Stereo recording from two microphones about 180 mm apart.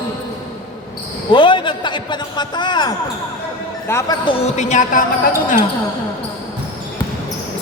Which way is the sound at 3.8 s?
15° left (ahead or behind).